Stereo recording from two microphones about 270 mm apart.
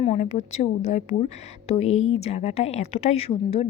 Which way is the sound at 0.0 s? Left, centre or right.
Left.